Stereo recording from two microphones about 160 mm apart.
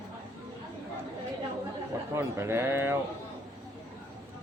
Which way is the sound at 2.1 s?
15° right (ahead or behind).